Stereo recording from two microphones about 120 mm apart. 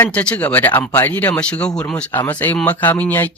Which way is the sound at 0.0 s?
10° left (ahead or behind).